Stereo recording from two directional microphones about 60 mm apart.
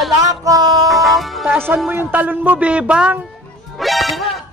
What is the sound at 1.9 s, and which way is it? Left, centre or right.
Speech, right.